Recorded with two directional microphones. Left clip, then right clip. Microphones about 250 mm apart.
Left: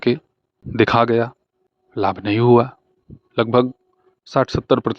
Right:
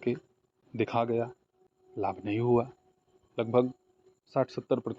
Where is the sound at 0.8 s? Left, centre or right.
Left.